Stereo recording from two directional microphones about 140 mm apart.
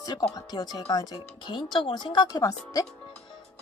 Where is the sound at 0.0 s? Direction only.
30° left (ahead or behind).